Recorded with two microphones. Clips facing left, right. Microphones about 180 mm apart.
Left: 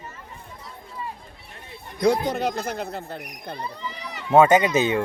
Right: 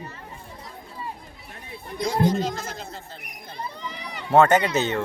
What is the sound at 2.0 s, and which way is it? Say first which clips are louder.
Speech: left 2 dB; 65° left (ahead or behind).